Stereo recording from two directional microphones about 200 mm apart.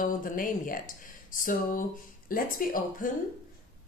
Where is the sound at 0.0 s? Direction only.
45° left (ahead or behind).